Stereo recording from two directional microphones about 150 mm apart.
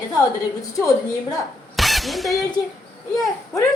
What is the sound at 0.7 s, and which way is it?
Speech, 25° left (ahead or behind).